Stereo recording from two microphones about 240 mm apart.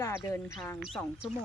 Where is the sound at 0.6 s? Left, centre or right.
Centre.